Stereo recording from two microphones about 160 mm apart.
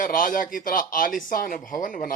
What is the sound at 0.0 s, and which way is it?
Speech, 55° left (ahead or behind).